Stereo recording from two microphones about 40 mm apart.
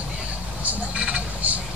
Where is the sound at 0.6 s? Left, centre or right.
Right.